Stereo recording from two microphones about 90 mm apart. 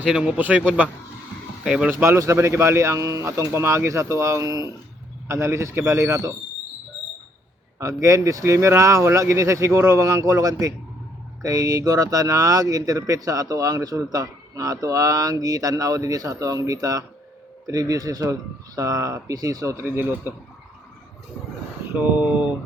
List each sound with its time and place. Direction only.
0.1 s speech: 10° right (ahead or behind)
1.9 s speech: 30° right (ahead or behind)
5.3 s speech: 30° right (ahead or behind)
8.0 s speech: 35° right (ahead or behind)
19.8 s a man's voice: 25° right (ahead or behind)
21.9 s speech: 20° right (ahead or behind)